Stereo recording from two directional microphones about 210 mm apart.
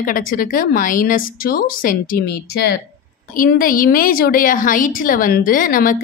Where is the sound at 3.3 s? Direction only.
40° left (ahead or behind).